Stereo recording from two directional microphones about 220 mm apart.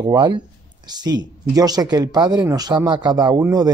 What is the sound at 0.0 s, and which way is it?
Speech, 20° right (ahead or behind).